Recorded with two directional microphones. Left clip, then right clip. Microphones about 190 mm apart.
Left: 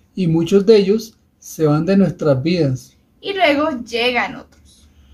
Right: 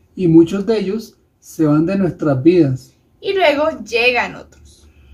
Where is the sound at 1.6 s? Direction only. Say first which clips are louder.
Even; 45° left (ahead or behind).